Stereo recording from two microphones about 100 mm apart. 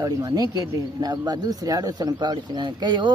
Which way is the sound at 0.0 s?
40° right (ahead or behind).